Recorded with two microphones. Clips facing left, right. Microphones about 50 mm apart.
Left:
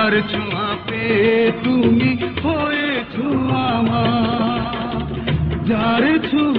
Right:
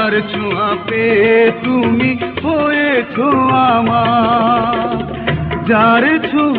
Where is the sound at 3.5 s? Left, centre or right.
Right.